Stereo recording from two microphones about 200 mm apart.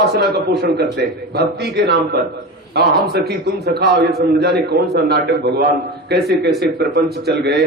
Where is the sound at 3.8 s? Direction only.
55° right (ahead or behind).